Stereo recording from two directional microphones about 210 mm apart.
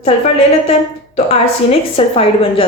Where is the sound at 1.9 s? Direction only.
25° left (ahead or behind).